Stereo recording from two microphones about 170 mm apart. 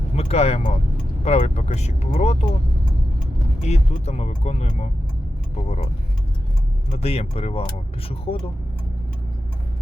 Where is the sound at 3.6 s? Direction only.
40° left (ahead or behind).